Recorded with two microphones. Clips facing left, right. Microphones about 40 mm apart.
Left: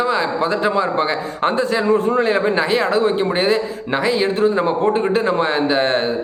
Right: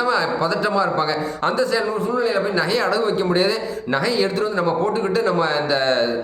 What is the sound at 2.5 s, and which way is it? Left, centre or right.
A man's voice, left.